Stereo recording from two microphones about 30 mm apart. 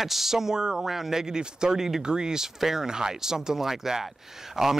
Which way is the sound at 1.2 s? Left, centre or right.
Right.